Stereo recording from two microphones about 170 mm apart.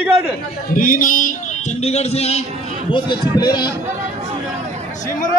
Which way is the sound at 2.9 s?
25° left (ahead or behind).